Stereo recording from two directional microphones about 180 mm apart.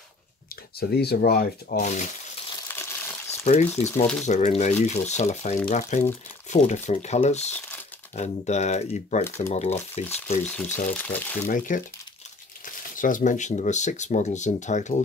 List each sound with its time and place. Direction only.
0.7 s speech: 60° left (ahead or behind)
1.8 s speech: 40° left (ahead or behind)
2.7 s crushing: 10° left (ahead or behind)
3.8 s speech: 40° left (ahead or behind)
9.2 s speech: 15° left (ahead or behind)
9.5 s speech: 40° left (ahead or behind)
10.4 s speech: 10° left (ahead or behind)
11.4 s speech: 50° left (ahead or behind)